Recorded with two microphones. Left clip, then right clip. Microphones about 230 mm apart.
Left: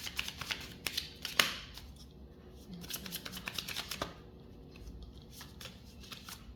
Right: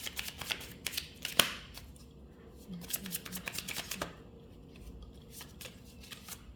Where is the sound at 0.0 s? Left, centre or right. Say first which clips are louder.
Left 1 dB; centre.